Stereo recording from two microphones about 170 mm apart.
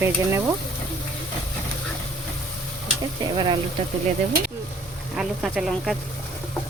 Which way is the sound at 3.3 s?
30° right (ahead or behind).